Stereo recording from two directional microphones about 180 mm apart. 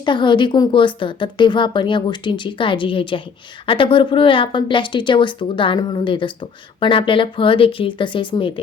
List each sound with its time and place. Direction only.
0.0 s speech: 25° left (ahead or behind)